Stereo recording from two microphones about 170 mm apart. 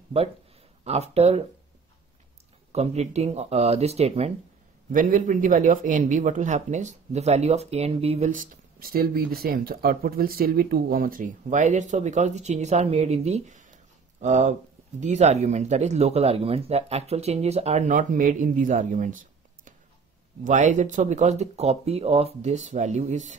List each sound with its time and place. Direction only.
1.1 s speech: 35° right (ahead or behind)
2.7 s speech: 40° right (ahead or behind)
4.9 s speech: 50° right (ahead or behind)